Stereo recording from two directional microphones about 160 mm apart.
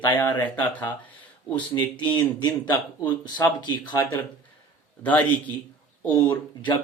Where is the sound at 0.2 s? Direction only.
10° left (ahead or behind).